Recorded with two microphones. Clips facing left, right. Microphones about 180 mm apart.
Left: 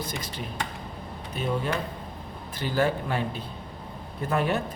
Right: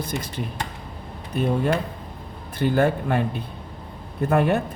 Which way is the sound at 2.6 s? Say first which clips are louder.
Right 5 dB; 55° right (ahead or behind).